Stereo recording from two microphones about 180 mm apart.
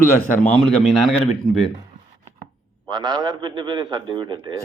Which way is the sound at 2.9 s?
25° right (ahead or behind).